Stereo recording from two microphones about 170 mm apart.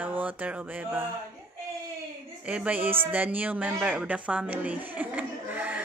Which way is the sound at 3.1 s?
10° right (ahead or behind).